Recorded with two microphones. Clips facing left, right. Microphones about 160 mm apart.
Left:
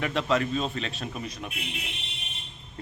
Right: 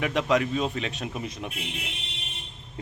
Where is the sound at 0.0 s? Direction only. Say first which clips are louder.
Right 2 dB; 15° right (ahead or behind).